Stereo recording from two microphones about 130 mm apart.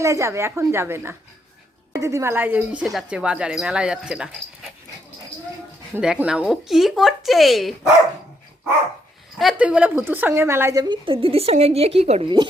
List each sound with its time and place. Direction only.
0.0 s a woman's voice: 25° right (ahead or behind); by 4.3 s 5° right (ahead or behind)
6.0 s speech: 5° right (ahead or behind)
9.4 s a woman's voice: 5° right (ahead or behind); by 12.3 s 55° right (ahead or behind)